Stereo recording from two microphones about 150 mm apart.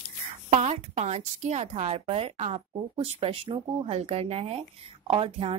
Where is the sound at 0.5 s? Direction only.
45° right (ahead or behind).